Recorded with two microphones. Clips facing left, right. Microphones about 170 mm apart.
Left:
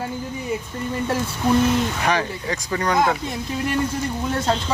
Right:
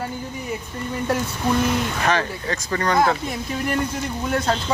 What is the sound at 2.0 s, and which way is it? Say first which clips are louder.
Speech: even; 15° left (ahead or behind).